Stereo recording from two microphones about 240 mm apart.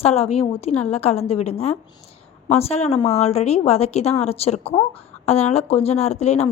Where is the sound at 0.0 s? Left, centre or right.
Left.